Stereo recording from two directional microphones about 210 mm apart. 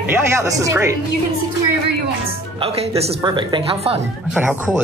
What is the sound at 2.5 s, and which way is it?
Speech, 30° right (ahead or behind).